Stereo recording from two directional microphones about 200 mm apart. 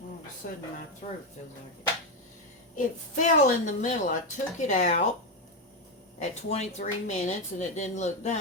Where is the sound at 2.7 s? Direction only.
40° left (ahead or behind).